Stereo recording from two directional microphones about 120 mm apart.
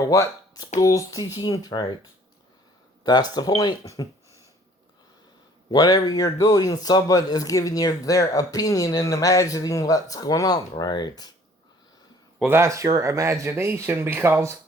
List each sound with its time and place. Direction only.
0.0 s a man's voice: 30° left (ahead or behind)
3.0 s a man's voice: 35° left (ahead or behind)
5.7 s a man's voice: 30° left (ahead or behind)
12.5 s speech: 20° right (ahead or behind)